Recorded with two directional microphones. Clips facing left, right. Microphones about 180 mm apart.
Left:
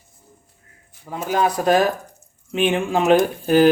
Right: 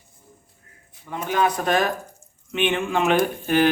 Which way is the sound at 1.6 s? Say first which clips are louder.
Left 5 dB; 35° left (ahead or behind).